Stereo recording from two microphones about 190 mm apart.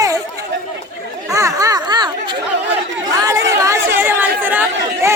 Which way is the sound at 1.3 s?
15° right (ahead or behind).